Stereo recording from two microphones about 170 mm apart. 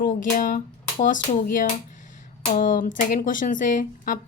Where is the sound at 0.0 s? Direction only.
50° left (ahead or behind).